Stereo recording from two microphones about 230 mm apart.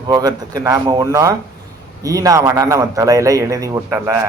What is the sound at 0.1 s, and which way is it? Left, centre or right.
A man's voice, centre.